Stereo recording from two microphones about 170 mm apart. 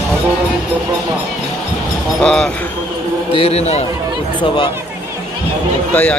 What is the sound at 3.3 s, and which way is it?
Speech, 35° left (ahead or behind).